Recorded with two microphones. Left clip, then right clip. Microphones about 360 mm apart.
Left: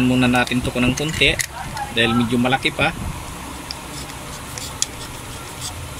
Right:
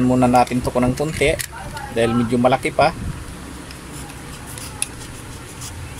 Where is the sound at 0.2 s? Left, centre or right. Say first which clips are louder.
Right 3 dB; centre.